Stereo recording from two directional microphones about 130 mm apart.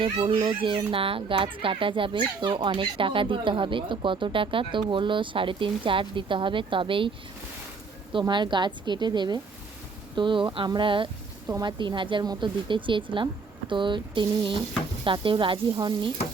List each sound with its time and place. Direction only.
0.0 s a child's voice: 40° right (ahead or behind)
8.3 s a child's voice: 35° right (ahead or behind)
11.4 s speech: 25° right (ahead or behind)
11.8 s a child's voice: 40° right (ahead or behind)